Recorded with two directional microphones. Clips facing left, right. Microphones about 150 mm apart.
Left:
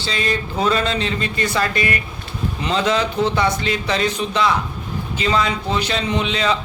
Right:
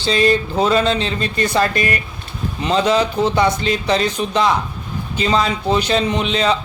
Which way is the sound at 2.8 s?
20° right (ahead or behind).